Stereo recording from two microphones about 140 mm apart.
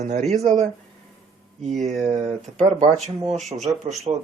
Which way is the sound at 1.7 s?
Centre (ahead or behind).